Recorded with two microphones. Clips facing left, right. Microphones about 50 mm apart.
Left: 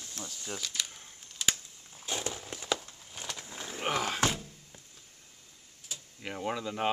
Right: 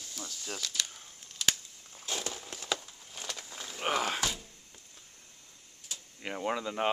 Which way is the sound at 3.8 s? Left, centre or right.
Centre.